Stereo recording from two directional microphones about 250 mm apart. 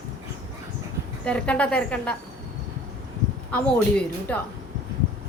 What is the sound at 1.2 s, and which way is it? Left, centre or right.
Speech, centre.